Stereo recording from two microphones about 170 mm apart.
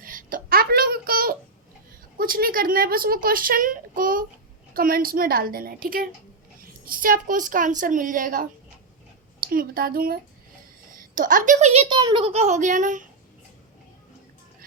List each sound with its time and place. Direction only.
0.0 s a sound: 55° right (ahead or behind)
2.1 s a woman's voice: 55° right (ahead or behind); by 11.9 s 40° right (ahead or behind)
11.9 s a child's voice: 30° right (ahead or behind); by 13.1 s 50° right (ahead or behind)